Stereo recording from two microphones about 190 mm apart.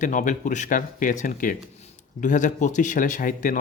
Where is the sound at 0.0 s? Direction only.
40° left (ahead or behind).